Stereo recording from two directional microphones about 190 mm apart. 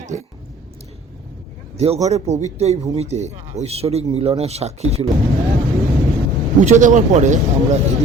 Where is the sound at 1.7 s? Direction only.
35° right (ahead or behind).